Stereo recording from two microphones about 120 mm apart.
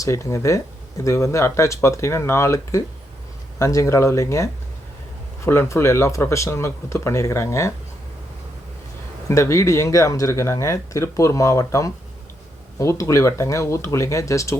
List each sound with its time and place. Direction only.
0.0 s speech: 25° left (ahead or behind)
5.5 s speech: 20° left (ahead or behind)
9.3 s speech: 25° left (ahead or behind)